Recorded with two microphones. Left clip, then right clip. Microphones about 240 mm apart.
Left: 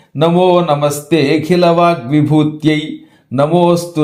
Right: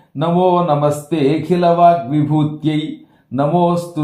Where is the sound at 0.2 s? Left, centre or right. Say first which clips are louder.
Left 4 dB; left.